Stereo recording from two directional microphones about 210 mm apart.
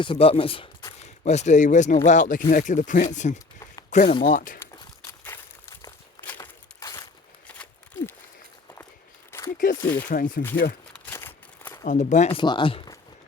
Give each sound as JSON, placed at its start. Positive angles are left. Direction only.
{"t": 0.0, "sound": "speech", "side_deg": 25}
{"t": 1.0, "sound": "speech", "side_deg": 30}
{"t": 5.8, "sound": "walk", "side_deg": 10}
{"t": 7.4, "sound": "a sound", "side_deg": 5}
{"t": 9.3, "sound": "single-lens reflex camera", "side_deg": 10}
{"t": 10.1, "sound": "speech", "side_deg": 40}
{"t": 10.9, "sound": "a sound", "side_deg": 10}
{"t": 11.9, "sound": "speech", "side_deg": 35}